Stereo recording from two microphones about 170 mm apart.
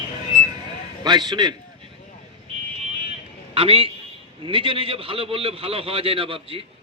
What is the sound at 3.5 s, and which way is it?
A man's voice, 35° right (ahead or behind).